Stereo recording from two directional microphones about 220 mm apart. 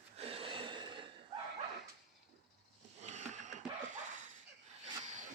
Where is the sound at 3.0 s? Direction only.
30° right (ahead or behind).